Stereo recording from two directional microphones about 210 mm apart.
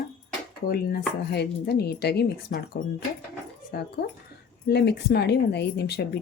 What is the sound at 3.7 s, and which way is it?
Speech, 50° left (ahead or behind).